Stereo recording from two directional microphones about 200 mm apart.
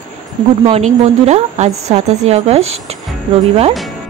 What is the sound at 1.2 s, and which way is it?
A woman's voice, 35° right (ahead or behind).